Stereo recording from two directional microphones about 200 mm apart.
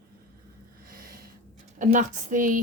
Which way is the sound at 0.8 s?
45° right (ahead or behind).